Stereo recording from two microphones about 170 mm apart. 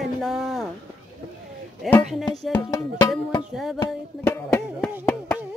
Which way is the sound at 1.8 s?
Centre (ahead or behind).